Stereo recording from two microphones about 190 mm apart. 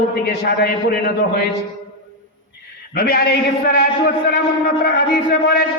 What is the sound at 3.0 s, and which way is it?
A man's voice, 55° left (ahead or behind).